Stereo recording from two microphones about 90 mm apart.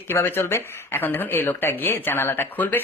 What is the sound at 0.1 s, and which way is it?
Speech, 25° left (ahead or behind).